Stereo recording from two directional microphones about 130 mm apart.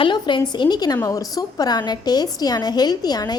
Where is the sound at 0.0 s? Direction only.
40° left (ahead or behind).